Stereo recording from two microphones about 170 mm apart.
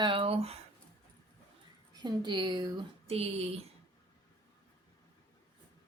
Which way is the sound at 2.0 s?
25° right (ahead or behind).